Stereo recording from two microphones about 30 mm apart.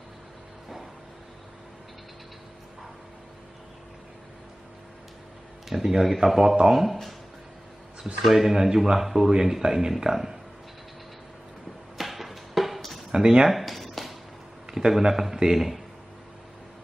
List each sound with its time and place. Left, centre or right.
5.7 s speech: centre
8.2 s speech: centre
12.0 s music: centre
13.1 s speech: right
13.5 s a sound: centre
14.9 s speech: centre